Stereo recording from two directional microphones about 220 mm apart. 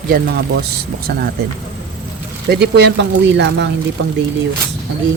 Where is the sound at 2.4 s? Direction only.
50° right (ahead or behind).